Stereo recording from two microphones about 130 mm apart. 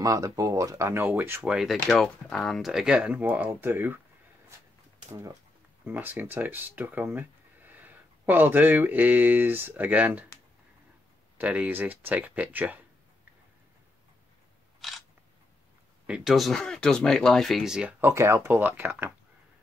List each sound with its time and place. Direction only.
0.0 s speech: 25° right (ahead or behind)
1.4 s speech: 5° right (ahead or behind)
5.1 s speech: 25° right (ahead or behind)
5.9 s speech: 15° right (ahead or behind)
11.3 s speech: 10° right (ahead or behind)
14.8 s camera: centre (ahead or behind)
16.1 s speech: centre (ahead or behind)
18.0 s speech: 20° right (ahead or behind)